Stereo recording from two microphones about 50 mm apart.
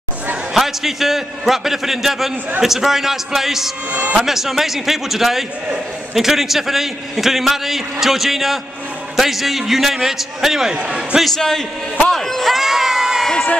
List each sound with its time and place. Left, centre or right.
0.6 s a man's voice: centre
10.7 s a man's voice: centre
11.3 s a man's voice: centre
12.1 s crowd: centre